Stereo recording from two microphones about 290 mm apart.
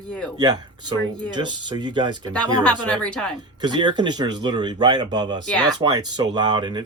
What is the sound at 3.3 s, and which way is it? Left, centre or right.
Speech, centre.